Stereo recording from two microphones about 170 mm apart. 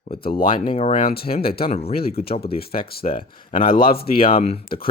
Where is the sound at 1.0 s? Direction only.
65° left (ahead or behind).